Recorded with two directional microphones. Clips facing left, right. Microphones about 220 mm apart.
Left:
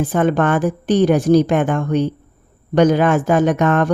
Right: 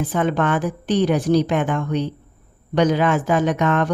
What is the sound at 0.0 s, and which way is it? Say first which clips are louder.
A woman's voice: left 4 dB; 45° left (ahead or behind).